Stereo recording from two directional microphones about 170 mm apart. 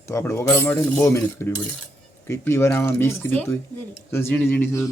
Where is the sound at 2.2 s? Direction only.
15° left (ahead or behind).